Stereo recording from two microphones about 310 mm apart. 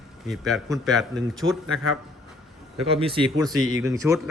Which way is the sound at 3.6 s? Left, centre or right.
Right.